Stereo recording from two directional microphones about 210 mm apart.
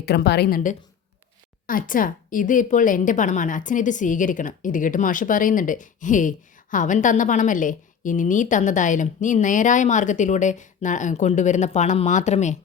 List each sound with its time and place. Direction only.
0.0 s a woman's voice: 50° left (ahead or behind); by 12.5 s 35° left (ahead or behind)